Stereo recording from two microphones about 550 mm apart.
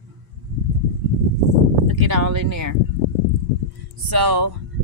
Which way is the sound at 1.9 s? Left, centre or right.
Right.